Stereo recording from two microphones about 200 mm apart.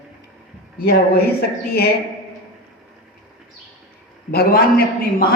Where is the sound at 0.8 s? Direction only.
50° left (ahead or behind).